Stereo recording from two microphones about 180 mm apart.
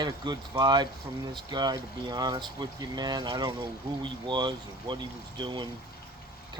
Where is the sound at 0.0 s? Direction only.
20° right (ahead or behind).